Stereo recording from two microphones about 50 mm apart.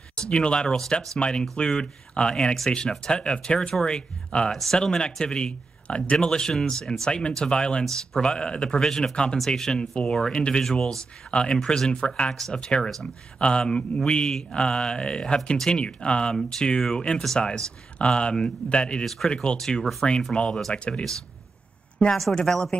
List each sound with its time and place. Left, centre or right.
0.1 s speech: centre
4.5 s speech: centre
4.7 s speech: centre
12.3 s speech: centre
19.0 s speech: centre
19.3 s speech: centre
19.8 s speech: centre
22.3 s speech: centre